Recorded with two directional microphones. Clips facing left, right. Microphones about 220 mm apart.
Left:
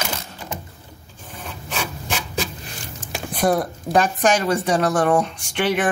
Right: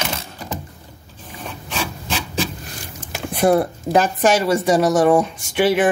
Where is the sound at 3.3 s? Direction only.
10° right (ahead or behind).